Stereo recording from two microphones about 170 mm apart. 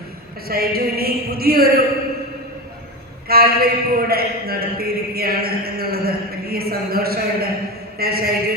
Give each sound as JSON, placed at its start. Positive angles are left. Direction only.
{"t": 0.4, "sound": "a man's voice", "side_deg": -65}
{"t": 3.2, "sound": "a man's voice", "side_deg": -65}
{"t": 7.9, "sound": "a sound", "side_deg": -65}